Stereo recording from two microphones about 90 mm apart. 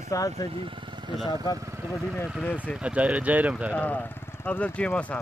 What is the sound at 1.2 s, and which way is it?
Speech, 50° left (ahead or behind).